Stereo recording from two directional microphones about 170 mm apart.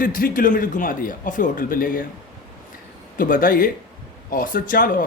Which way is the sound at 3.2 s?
50° left (ahead or behind).